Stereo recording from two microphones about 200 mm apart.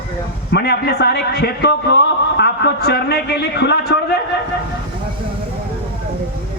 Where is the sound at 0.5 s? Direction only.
55° left (ahead or behind).